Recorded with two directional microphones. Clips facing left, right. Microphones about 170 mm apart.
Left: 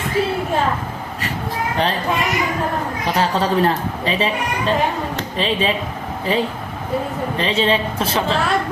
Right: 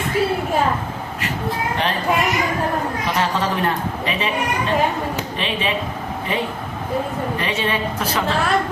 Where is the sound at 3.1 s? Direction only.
30° left (ahead or behind).